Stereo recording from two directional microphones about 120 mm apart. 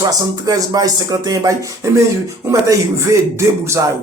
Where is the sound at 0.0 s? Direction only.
30° right (ahead or behind).